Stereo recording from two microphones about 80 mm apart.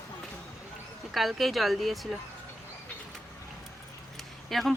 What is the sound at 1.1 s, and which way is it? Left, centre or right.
Speech, centre.